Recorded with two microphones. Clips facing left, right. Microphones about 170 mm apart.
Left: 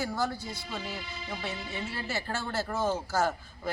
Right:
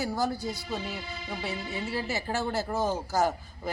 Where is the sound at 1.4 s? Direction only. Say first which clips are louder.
Right 3 dB; 10° right (ahead or behind).